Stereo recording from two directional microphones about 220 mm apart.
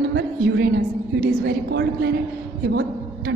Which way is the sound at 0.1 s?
50° right (ahead or behind).